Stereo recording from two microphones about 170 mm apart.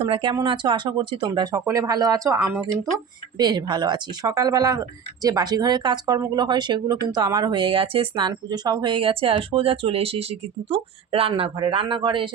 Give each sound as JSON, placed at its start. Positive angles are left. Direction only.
{"t": 0.0, "sound": "speech", "side_deg": -30}
{"t": 2.4, "sound": "speech", "side_deg": -5}
{"t": 3.3, "sound": "speech", "side_deg": -25}